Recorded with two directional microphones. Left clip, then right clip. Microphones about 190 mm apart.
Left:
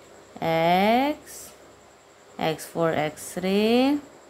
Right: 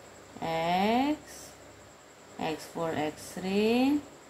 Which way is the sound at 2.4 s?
45° left (ahead or behind).